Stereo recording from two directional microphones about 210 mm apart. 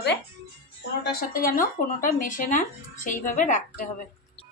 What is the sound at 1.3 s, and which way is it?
A woman's voice, 40° left (ahead or behind).